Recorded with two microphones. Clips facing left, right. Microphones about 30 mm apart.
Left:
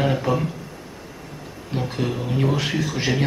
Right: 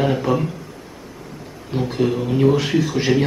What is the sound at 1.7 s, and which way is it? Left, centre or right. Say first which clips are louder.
A man's voice: right 5 dB; centre.